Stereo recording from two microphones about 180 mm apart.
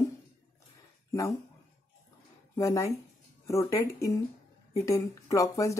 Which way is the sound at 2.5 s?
15° left (ahead or behind).